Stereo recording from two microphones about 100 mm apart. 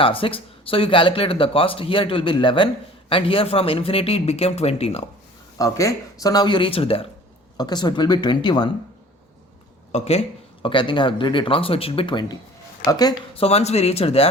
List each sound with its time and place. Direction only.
0.0 s speech: 65° left (ahead or behind); by 5.0 s 90° left
5.5 s speech: 35° left (ahead or behind); by 7.1 s 70° left (ahead or behind)
7.5 s speech: 45° left (ahead or behind)
10.0 s speech: 90° left; by 12.4 s 55° left (ahead or behind)
12.8 s speech: 40° left (ahead or behind)
13.3 s speech: 85° left